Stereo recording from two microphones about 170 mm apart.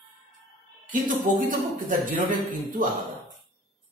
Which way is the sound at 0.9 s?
50° right (ahead or behind).